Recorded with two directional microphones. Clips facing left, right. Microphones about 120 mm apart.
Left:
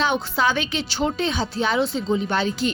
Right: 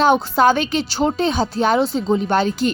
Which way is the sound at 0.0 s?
45° right (ahead or behind).